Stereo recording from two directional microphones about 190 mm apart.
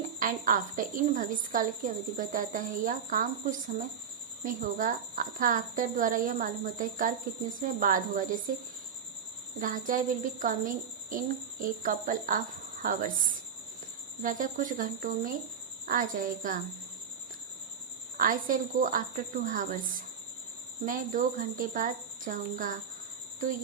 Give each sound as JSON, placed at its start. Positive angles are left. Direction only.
{"t": 0.2, "sound": "a woman's voice", "side_deg": -45}
{"t": 9.6, "sound": "a woman's voice", "side_deg": -45}
{"t": 18.2, "sound": "a woman's voice", "side_deg": -45}